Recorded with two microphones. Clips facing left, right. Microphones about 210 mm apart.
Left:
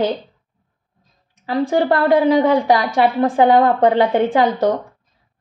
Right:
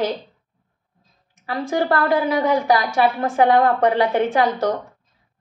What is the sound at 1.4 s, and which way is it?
A woman's voice, 25° left (ahead or behind).